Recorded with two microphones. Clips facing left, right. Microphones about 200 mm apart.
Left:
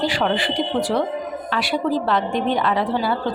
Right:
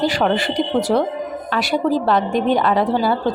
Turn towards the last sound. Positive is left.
turn(degrees=-45)  # may be behind; listen again after turning